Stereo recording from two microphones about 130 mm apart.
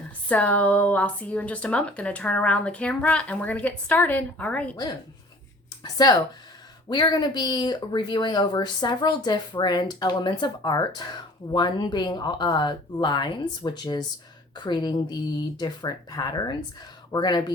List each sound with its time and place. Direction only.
0.3 s speech: 10° left (ahead or behind)
5.8 s speech: 30° left (ahead or behind)